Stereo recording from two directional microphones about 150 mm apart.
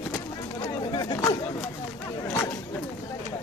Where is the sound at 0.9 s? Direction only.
25° left (ahead or behind).